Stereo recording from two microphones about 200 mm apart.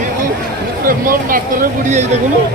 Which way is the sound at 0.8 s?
45° right (ahead or behind).